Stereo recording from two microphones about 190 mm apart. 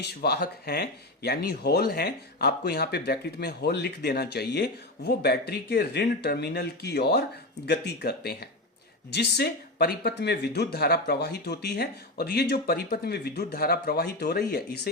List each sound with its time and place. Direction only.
0.0 s speech: 55° left (ahead or behind)